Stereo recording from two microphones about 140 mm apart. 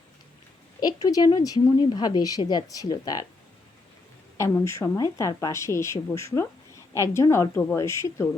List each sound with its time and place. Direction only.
0.8 s a woman's voice: 30° left (ahead or behind)
4.4 s a woman's voice: 20° left (ahead or behind)